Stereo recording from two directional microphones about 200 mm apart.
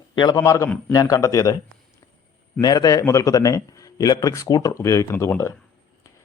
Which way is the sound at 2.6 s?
20° left (ahead or behind).